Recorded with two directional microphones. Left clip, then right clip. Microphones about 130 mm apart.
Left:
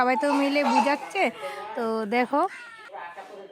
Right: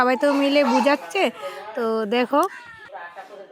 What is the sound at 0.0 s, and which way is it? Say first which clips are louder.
Speech: right 4 dB; 20° right (ahead or behind).